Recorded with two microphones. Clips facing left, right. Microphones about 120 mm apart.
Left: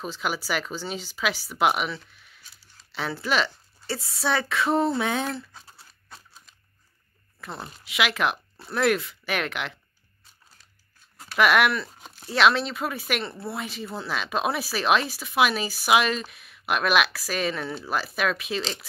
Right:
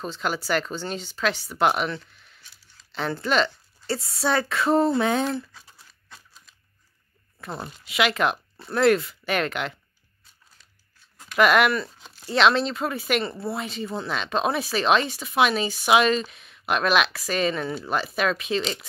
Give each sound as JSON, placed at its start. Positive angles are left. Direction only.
{"t": 0.0, "sound": "a woman's voice", "side_deg": 5}
{"t": 5.5, "sound": "a sound", "side_deg": 30}
{"t": 7.3, "sound": "speech", "side_deg": 0}
{"t": 11.3, "sound": "speech", "side_deg": 0}